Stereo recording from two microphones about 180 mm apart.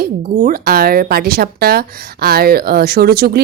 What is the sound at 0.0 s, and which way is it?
Speech, 55° right (ahead or behind).